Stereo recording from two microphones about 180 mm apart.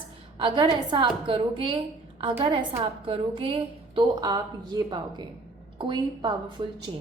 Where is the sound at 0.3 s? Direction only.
25° right (ahead or behind).